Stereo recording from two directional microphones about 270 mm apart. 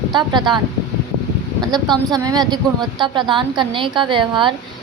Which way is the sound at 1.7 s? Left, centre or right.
Centre.